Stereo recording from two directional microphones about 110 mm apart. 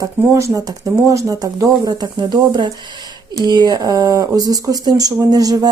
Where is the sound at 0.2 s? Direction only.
25° right (ahead or behind).